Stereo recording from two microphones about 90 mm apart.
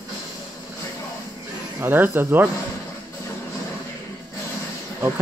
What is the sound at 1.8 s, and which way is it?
Speech, 25° right (ahead or behind).